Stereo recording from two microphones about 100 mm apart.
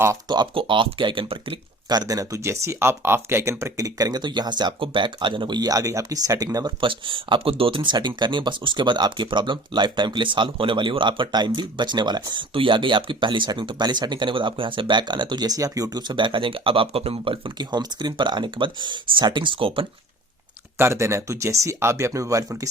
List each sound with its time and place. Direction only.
0.3 s speech: 50° right (ahead or behind)
1.9 s speech: 40° right (ahead or behind)
6.8 s speech: 55° right (ahead or behind)
20.7 s speech: 25° right (ahead or behind)